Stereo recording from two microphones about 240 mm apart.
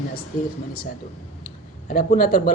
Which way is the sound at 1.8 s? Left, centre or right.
Left.